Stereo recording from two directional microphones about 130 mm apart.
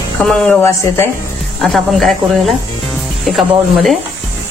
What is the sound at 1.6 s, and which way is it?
Speech, centre (ahead or behind).